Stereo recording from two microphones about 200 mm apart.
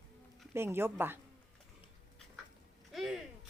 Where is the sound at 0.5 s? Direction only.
10° right (ahead or behind).